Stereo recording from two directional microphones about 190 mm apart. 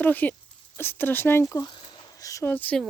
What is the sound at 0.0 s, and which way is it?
Speech, 10° left (ahead or behind).